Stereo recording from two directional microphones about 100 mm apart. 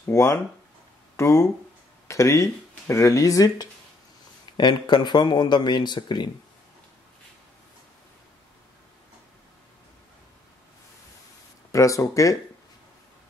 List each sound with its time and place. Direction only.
0.0 s speech: 30° left (ahead or behind); by 6.3 s 50° left (ahead or behind)
11.7 s speech: 35° left (ahead or behind)